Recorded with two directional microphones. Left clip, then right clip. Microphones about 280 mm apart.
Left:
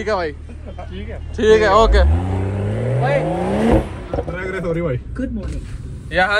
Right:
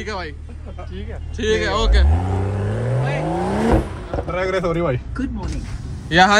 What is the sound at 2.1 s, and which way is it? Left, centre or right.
Vehicle, centre.